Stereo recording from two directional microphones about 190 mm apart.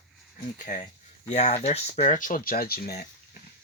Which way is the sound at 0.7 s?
45° left (ahead or behind).